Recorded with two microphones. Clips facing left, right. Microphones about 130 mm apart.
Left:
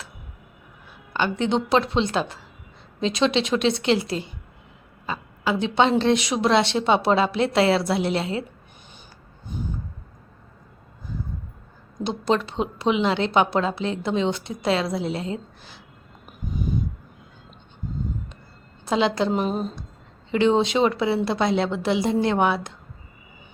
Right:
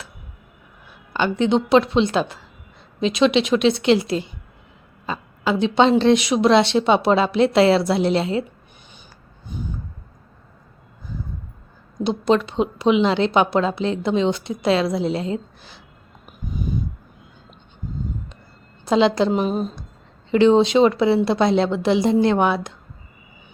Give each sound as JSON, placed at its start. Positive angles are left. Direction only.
{"t": 1.1, "sound": "a woman's voice", "side_deg": -20}
{"t": 5.4, "sound": "a woman's voice", "side_deg": -20}
{"t": 12.0, "sound": "a woman's voice", "side_deg": -15}
{"t": 18.9, "sound": "a woman's voice", "side_deg": -20}
{"t": 19.3, "sound": "a woman's voice", "side_deg": -5}
{"t": 20.3, "sound": "a woman's voice", "side_deg": -25}